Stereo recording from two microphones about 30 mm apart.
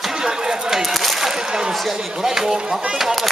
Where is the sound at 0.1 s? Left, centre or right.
Right.